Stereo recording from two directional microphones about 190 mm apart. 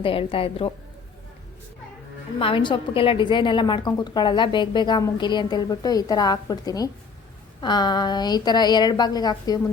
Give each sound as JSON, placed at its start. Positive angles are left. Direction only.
{"t": 0.0, "sound": "a woman's voice", "side_deg": 30}
{"t": 2.4, "sound": "a woman's voice", "side_deg": 25}